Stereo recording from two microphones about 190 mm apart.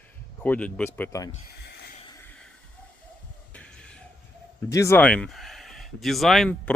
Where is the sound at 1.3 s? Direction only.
60° left (ahead or behind).